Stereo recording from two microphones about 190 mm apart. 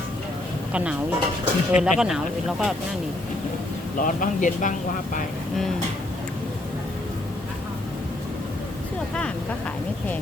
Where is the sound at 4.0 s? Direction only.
45° left (ahead or behind).